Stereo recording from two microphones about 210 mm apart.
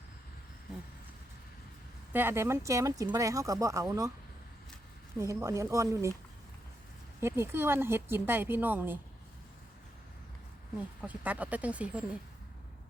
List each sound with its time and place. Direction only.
2.1 s speech: 10° right (ahead or behind)
5.2 s speech: 15° right (ahead or behind)
7.2 s speech: 10° right (ahead or behind)
11.0 s speech: 5° right (ahead or behind)